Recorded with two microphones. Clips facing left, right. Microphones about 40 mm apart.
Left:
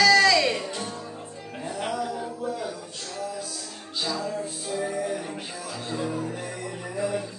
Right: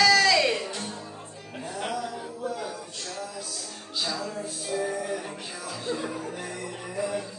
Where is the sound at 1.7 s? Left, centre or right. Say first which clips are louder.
Left 2 dB; centre.